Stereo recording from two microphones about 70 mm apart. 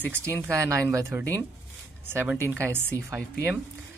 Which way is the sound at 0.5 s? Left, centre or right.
Right.